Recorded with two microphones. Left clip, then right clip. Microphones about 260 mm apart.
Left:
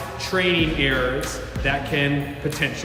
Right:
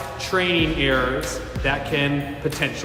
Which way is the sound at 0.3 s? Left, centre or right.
Centre.